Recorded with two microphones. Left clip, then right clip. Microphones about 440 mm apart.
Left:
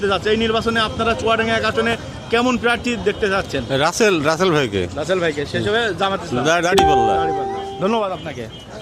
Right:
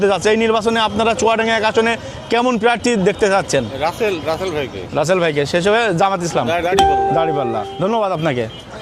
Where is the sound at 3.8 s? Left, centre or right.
Left.